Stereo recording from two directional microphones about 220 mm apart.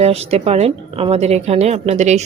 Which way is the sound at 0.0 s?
30° right (ahead or behind).